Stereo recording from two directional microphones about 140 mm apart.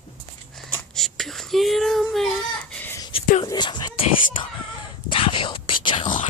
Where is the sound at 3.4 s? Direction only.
30° left (ahead or behind).